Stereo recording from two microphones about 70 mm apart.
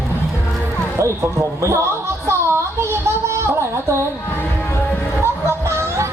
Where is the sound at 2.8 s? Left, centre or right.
Right.